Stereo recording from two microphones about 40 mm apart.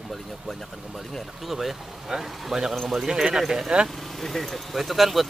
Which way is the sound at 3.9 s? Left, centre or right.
Centre.